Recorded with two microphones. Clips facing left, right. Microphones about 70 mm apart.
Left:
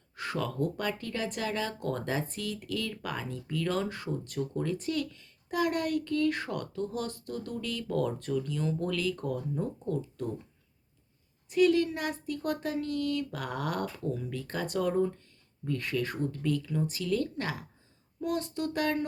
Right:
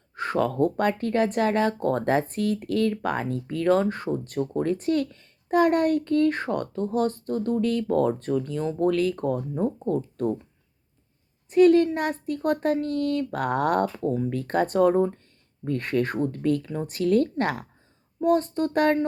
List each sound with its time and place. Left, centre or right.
0.1 s speech: right
11.4 s a woman's voice: right
14.4 s speech: right
18.2 s speech: right